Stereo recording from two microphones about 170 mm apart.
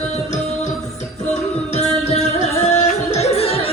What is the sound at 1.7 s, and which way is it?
Music, 40° left (ahead or behind).